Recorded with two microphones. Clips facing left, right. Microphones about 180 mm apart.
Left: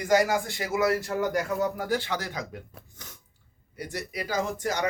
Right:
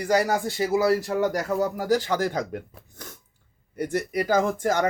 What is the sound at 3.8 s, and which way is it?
Speech, 50° right (ahead or behind).